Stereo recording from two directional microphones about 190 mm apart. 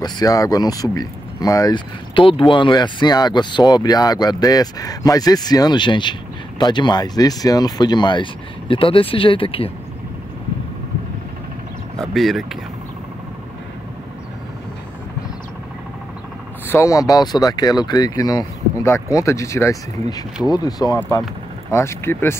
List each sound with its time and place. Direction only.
0.0 s speech: 20° left (ahead or behind)
12.0 s speech: centre (ahead or behind)
16.6 s speech: 15° left (ahead or behind)